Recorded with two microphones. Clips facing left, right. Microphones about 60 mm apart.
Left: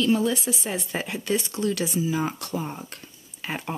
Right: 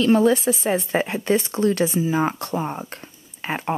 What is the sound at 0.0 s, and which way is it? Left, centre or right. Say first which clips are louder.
Speech: right 6 dB; right.